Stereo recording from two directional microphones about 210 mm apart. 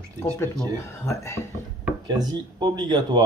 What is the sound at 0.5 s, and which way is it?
Speech, 15° left (ahead or behind).